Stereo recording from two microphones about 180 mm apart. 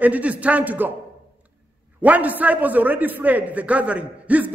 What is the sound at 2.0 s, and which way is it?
A man's voice, 10° right (ahead or behind).